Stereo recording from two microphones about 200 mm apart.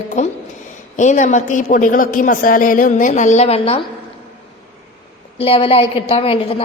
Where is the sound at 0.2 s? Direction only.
35° left (ahead or behind).